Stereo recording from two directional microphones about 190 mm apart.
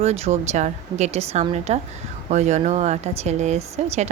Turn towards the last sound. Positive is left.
turn(degrees=-35)  # may be behind; listen again after turning